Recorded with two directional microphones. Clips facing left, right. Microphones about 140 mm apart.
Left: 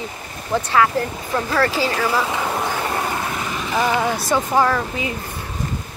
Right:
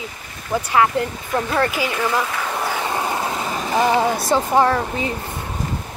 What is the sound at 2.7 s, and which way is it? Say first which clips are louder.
Vehicle: even; 15° right (ahead or behind).